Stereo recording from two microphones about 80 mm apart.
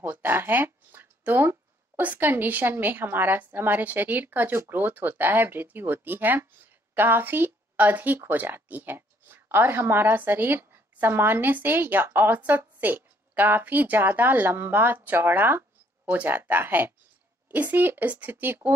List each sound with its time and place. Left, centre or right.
0.0 s speech: right